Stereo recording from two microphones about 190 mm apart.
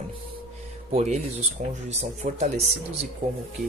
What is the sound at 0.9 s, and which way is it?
Speech, 35° right (ahead or behind).